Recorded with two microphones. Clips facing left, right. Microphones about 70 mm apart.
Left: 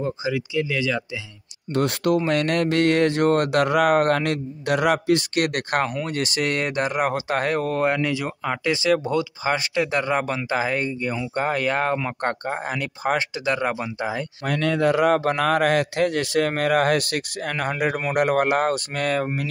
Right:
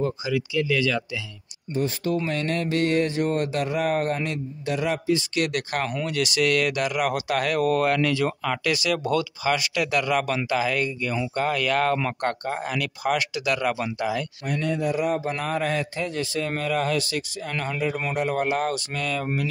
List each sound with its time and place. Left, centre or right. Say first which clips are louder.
0.2 s speech: left 1 dB; left
1.7 s speech: left 4 dB; left
2.2 s speech: left 5 dB; left
6.0 s speech: right 1 dB; left
14.5 s speech: left 5 dB; left